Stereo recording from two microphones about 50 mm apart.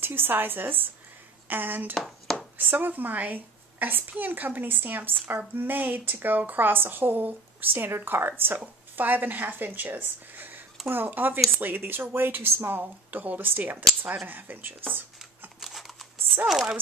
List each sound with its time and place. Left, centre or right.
0.0 s a woman's voice: right
2.0 s a sound: centre
2.5 s a woman's voice: right
13.2 s speech: right
14.9 s a sound: right
15.6 s computer keyboard: centre
16.4 s chopping: centre